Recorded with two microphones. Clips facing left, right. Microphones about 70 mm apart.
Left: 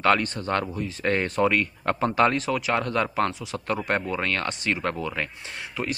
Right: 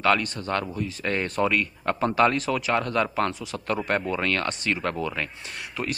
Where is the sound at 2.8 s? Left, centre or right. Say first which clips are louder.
Even; left.